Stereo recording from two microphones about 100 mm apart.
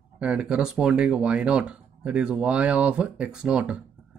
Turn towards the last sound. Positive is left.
turn(degrees=-10)  # may be behind; listen again after turning